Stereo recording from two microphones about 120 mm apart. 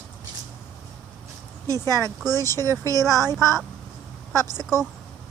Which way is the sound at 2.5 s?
30° right (ahead or behind).